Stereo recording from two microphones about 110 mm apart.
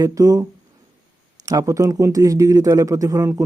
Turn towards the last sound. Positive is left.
turn(degrees=-30)  # may be behind; listen again after turning